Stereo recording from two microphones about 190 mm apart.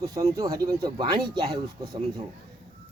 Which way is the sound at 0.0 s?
20° right (ahead or behind).